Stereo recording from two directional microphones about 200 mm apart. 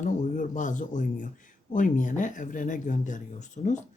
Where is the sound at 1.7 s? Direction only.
40° left (ahead or behind).